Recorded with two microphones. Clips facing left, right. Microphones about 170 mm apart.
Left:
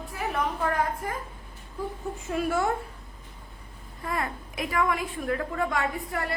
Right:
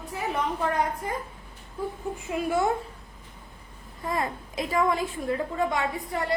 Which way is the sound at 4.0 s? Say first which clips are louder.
Right 2 dB; 25° right (ahead or behind).